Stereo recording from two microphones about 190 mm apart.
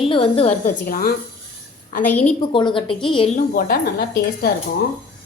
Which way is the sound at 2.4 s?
25° left (ahead or behind).